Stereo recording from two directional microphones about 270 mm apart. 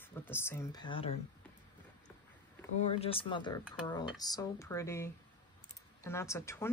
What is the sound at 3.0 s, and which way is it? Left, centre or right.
Speech, left.